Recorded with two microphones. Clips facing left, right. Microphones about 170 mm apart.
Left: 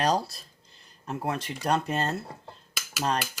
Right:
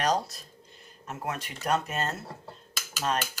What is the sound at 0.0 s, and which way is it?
Speech, 30° left (ahead or behind).